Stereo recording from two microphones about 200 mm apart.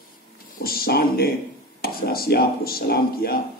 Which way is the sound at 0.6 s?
50° left (ahead or behind).